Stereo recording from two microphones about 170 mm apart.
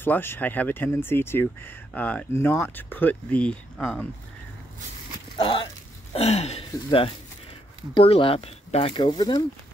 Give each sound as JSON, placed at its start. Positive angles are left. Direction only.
{"t": 0.0, "sound": "speech", "side_deg": 10}
{"t": 5.4, "sound": "speech", "side_deg": 30}